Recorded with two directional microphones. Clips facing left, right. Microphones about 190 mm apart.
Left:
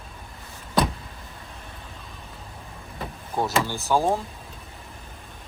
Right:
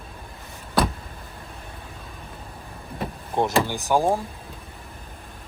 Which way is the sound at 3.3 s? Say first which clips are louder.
Right 3 dB; 15° right (ahead or behind).